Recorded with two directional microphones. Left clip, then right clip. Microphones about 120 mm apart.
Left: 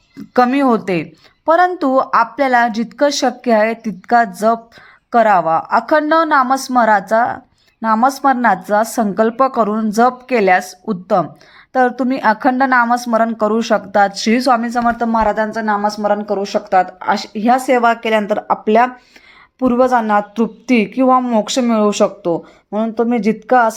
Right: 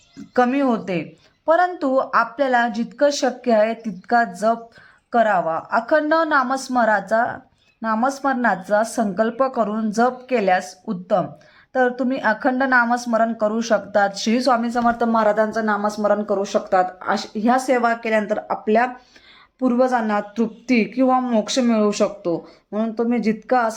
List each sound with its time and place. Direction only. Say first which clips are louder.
0.3 s a woman's voice: left 6 dB; 35° left (ahead or behind)
19.5 s a woman's voice: left 6 dB; 30° left (ahead or behind)